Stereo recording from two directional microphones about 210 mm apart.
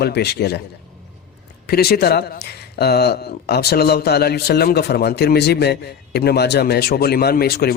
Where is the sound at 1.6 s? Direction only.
50° left (ahead or behind).